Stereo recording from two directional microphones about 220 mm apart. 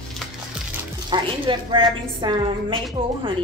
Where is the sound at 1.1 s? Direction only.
20° right (ahead or behind).